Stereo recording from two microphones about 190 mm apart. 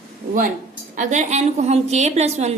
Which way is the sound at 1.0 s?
40° right (ahead or behind).